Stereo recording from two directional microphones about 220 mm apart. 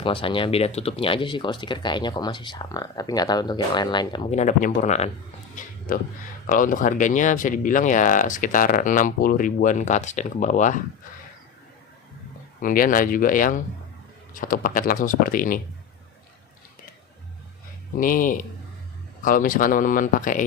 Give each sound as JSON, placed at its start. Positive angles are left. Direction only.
{"t": 0.0, "sound": "speech", "side_deg": 25}
{"t": 12.6, "sound": "speech", "side_deg": 40}
{"t": 17.9, "sound": "speech", "side_deg": 40}